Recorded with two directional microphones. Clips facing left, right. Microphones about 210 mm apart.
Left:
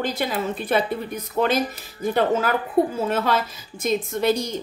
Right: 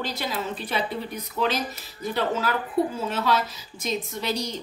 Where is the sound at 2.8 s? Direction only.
50° left (ahead or behind).